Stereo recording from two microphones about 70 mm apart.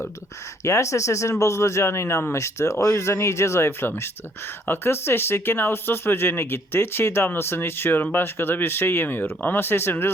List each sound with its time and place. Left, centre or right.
0.6 s speech: left